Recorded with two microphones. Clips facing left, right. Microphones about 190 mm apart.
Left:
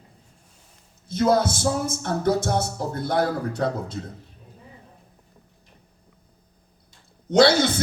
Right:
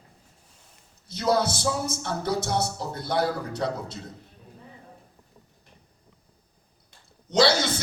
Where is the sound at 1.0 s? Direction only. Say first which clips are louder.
Left 4 dB; 50° left (ahead or behind).